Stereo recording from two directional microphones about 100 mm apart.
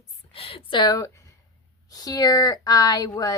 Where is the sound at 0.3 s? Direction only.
70° left (ahead or behind).